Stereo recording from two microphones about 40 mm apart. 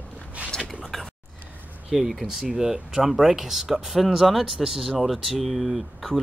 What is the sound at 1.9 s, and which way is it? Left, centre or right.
Speech, centre.